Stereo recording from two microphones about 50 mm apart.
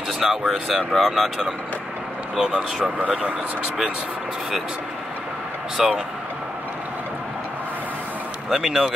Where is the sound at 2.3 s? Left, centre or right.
Centre.